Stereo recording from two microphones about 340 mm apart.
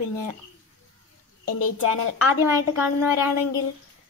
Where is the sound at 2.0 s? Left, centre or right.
Left.